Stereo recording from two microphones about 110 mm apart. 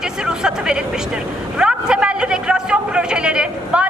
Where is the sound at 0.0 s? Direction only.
5° right (ahead or behind).